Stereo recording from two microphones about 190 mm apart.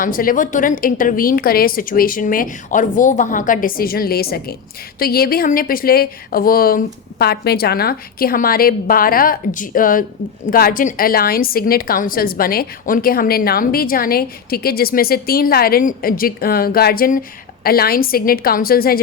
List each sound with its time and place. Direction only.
0.0 s a woman's voice: 50° left (ahead or behind)